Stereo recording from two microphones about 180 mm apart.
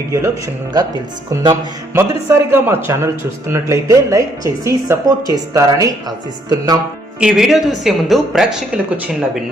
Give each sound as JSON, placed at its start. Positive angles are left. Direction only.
{"t": 0.1, "sound": "speech", "side_deg": -20}
{"t": 7.2, "sound": "speech", "side_deg": -5}